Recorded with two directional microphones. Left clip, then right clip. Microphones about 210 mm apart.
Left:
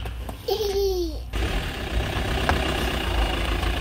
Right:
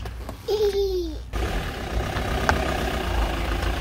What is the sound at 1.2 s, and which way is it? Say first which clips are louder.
Vehicle: even; 50° right (ahead or behind).